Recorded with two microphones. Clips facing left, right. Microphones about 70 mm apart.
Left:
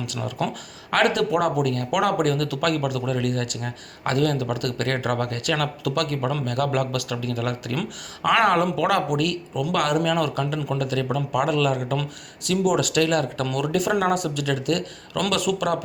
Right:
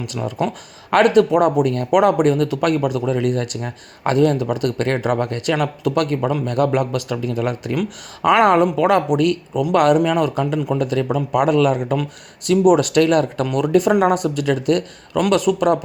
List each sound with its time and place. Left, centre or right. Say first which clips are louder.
0.0 s speech: right 5 dB; right
10.0 s speech: right 5 dB; right
13.4 s speech: right 7 dB; right